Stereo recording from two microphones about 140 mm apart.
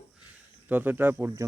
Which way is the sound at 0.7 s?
10° right (ahead or behind).